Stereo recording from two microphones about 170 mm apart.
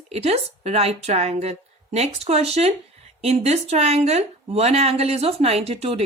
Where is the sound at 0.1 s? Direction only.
35° right (ahead or behind).